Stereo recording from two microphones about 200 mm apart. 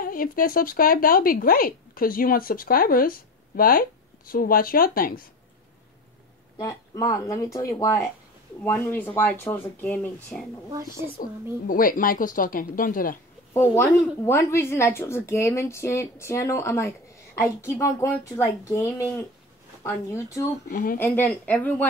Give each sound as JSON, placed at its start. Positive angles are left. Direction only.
{"t": 0.0, "sound": "speech", "side_deg": 45}
{"t": 6.6, "sound": "speech", "side_deg": 15}
{"t": 11.1, "sound": "speech", "side_deg": 45}
{"t": 13.5, "sound": "speech", "side_deg": 10}
{"t": 20.7, "sound": "speech", "side_deg": 45}
{"t": 21.0, "sound": "speech", "side_deg": 5}